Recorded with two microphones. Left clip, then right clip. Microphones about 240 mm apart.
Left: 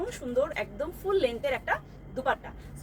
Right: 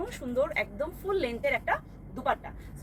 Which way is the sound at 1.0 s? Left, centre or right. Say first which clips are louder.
Left 3 dB; centre.